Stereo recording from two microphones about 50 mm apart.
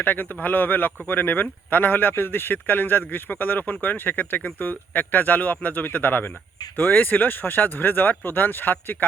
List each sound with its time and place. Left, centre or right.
0.0 s speech: left